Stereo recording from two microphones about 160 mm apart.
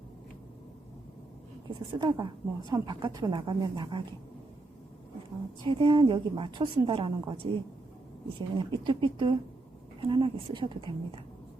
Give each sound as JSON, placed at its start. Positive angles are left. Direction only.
{"t": 1.7, "sound": "a woman's voice", "side_deg": -30}
{"t": 5.6, "sound": "a woman's voice", "side_deg": -30}